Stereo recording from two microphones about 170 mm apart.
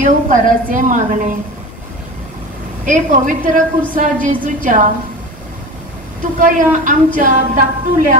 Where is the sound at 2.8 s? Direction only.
50° right (ahead or behind).